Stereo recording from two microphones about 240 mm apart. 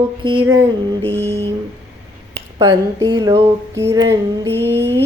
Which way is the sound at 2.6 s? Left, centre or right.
Centre.